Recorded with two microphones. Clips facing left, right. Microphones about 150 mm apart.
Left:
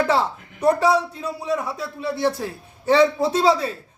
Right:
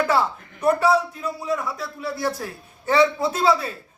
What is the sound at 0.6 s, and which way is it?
A man's voice, 30° left (ahead or behind).